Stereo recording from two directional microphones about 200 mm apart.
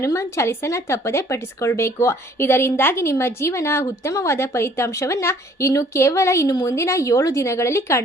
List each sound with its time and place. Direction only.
0.0 s speech: 15° left (ahead or behind)